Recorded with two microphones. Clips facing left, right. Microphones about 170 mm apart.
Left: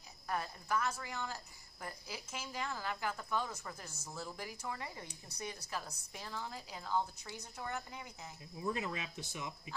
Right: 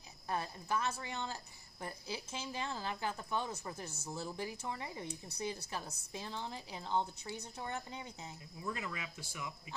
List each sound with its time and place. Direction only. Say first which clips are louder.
0.3 s speech: even; 25° right (ahead or behind)
8.5 s speech: left 4 dB; 20° left (ahead or behind)